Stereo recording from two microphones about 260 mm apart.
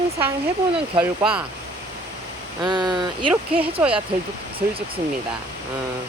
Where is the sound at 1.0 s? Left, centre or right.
Centre.